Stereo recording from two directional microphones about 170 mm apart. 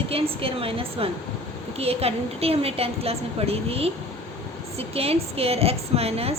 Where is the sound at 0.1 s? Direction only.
35° right (ahead or behind).